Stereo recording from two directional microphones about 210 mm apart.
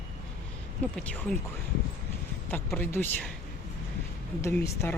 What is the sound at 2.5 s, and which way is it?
Speech, 10° left (ahead or behind).